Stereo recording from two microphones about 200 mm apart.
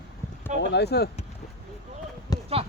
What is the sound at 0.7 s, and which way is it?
Speech, 55° left (ahead or behind).